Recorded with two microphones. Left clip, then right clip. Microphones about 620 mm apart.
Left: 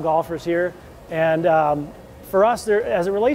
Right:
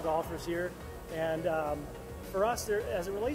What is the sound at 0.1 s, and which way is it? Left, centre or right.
Speech, left.